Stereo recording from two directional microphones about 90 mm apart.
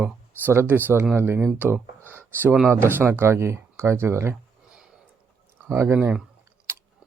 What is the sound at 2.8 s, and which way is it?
Speech, 25° right (ahead or behind).